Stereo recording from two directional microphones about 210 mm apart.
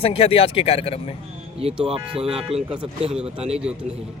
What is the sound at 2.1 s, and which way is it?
Speech, 5° right (ahead or behind).